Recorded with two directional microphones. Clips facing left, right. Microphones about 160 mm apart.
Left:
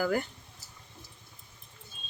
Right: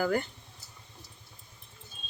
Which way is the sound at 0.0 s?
Centre (ahead or behind).